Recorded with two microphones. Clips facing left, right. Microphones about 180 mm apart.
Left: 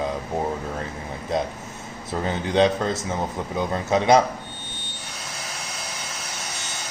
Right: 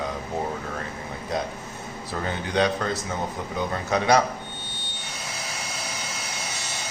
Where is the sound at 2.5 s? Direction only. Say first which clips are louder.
Left 4 dB; 25° left (ahead or behind).